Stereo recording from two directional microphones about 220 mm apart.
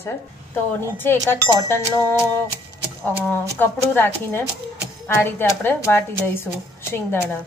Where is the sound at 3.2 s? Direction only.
10° left (ahead or behind).